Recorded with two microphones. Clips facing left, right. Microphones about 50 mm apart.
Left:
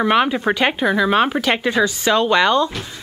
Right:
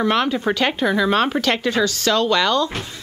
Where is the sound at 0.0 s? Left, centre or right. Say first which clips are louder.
Left 3 dB; centre.